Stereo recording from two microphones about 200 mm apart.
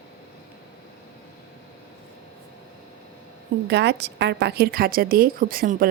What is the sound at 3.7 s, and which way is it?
A woman's voice, 55° right (ahead or behind).